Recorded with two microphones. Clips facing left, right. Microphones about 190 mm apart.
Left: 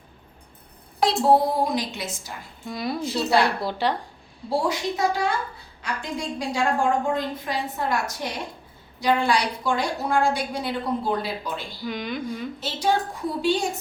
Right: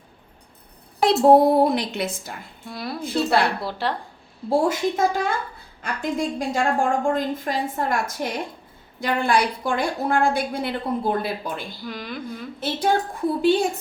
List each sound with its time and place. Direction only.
1.0 s a woman's voice: 55° right (ahead or behind)
2.6 s a woman's voice: centre (ahead or behind)
3.0 s a woman's voice: 55° right (ahead or behind)
3.6 s a woman's voice: centre (ahead or behind)
4.4 s a woman's voice: 50° right (ahead or behind)
11.9 s a woman's voice: centre (ahead or behind)
12.5 s a woman's voice: 55° right (ahead or behind)